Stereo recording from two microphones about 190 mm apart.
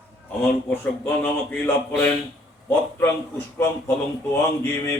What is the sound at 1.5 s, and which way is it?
Speech, 10° left (ahead or behind).